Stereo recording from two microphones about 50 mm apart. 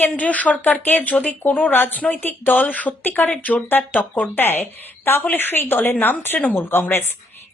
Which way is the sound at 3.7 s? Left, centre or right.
Left.